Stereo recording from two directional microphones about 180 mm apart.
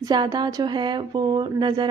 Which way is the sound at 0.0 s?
25° right (ahead or behind).